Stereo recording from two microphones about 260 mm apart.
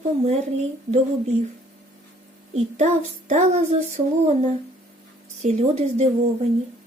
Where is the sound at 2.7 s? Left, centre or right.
Right.